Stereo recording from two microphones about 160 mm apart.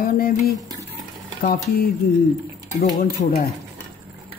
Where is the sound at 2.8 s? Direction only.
55° left (ahead or behind).